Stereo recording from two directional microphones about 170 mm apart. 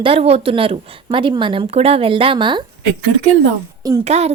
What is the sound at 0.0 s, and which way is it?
Speech, 35° right (ahead or behind).